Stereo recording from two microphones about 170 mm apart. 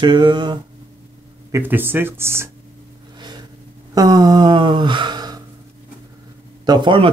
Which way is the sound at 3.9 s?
20° right (ahead or behind).